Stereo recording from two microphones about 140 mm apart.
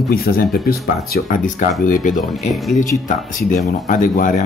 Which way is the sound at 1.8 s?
70° left (ahead or behind).